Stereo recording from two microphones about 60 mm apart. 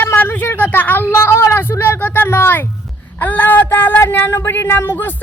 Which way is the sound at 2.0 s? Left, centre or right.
Left.